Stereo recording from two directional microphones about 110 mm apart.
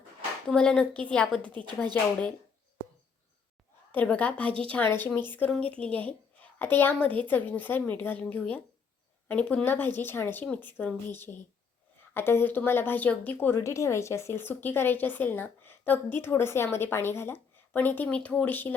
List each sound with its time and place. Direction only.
0.4 s a woman's voice: 10° left (ahead or behind)
3.9 s a woman's voice: 10° left (ahead or behind)